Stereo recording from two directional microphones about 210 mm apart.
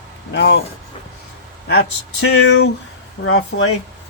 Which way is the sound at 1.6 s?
50° left (ahead or behind).